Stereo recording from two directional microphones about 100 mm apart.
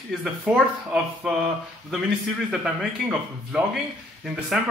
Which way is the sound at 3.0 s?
Centre (ahead or behind).